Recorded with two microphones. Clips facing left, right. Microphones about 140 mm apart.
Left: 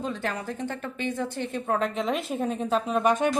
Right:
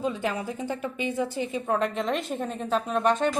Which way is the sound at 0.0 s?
10° right (ahead or behind).